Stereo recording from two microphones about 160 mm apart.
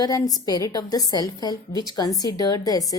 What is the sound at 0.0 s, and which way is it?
A woman's voice, 20° left (ahead or behind).